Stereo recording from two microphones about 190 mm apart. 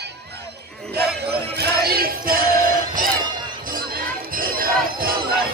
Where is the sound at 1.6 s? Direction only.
55° right (ahead or behind).